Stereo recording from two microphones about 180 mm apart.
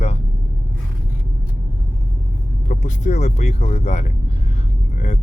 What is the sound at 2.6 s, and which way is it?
Speech, 40° left (ahead or behind).